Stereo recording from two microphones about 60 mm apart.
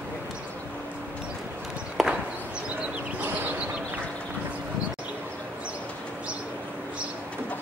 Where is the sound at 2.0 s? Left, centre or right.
Centre.